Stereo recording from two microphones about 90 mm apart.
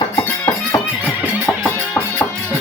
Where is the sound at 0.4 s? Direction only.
25° left (ahead or behind).